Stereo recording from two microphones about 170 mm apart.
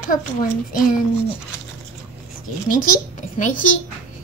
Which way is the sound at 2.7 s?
55° left (ahead or behind).